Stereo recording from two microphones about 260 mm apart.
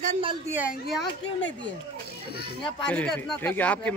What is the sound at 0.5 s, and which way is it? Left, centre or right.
Speech, centre.